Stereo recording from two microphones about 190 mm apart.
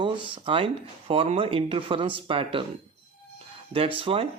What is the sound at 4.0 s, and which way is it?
Speech, 30° right (ahead or behind).